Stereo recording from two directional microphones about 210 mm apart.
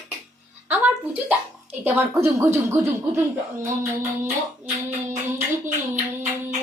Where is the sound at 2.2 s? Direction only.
15° right (ahead or behind).